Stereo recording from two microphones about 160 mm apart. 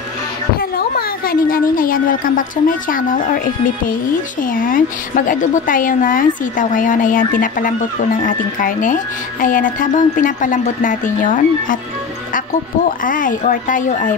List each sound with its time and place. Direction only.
0.6 s a woman's voice: 70° left (ahead or behind)
4.4 s speech: 60° left (ahead or behind)
13.0 s speech: 55° left (ahead or behind)